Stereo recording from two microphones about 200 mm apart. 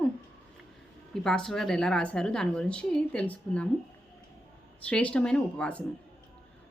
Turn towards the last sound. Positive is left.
turn(degrees=5)  # may be behind; listen again after turning